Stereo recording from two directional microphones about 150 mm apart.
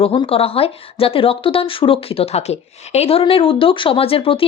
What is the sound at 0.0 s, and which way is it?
Speech, 40° left (ahead or behind).